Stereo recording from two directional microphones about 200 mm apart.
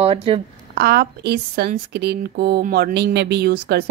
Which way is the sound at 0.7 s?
55° right (ahead or behind).